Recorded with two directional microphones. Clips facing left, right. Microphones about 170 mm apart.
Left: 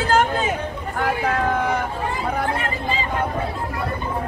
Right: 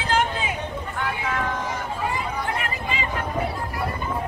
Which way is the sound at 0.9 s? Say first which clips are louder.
Left 7 dB; 45° left (ahead or behind).